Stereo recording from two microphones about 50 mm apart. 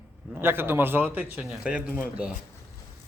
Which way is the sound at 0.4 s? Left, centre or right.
Right.